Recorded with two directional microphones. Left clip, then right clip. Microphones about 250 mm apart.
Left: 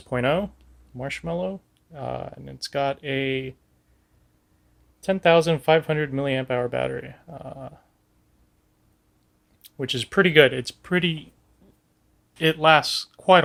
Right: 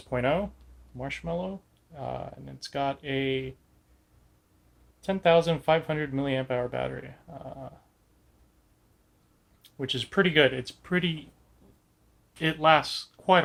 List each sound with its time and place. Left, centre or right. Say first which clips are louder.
0.1 s speech: left 4 dB; left
4.9 s speech: left 4 dB; left
9.6 s speech: left 4 dB; left
12.4 s speech: left 5 dB; left